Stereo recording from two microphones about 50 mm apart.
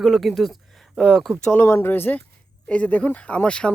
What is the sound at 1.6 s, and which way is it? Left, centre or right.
Speech, left.